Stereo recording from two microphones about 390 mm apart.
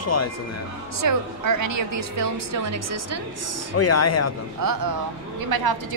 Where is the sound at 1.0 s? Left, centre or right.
Right.